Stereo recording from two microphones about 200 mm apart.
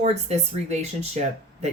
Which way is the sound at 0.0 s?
35° right (ahead or behind).